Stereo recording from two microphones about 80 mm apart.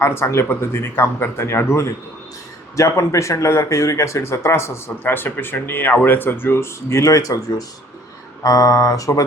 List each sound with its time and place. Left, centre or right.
0.0 s speech: left
8.4 s speech: left